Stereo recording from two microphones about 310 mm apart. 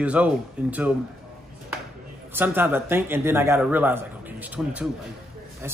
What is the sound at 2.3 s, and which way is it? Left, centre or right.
Speech, centre.